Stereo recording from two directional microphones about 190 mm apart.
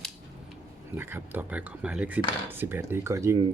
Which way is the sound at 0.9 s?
10° right (ahead or behind).